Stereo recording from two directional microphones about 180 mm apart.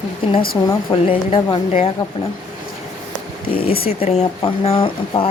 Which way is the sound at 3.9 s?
35° left (ahead or behind).